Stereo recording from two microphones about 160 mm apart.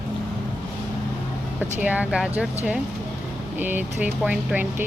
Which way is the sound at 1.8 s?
10° right (ahead or behind).